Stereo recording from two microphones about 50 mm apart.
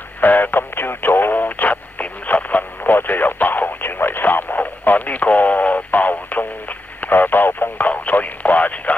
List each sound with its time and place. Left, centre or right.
0.2 s radio: left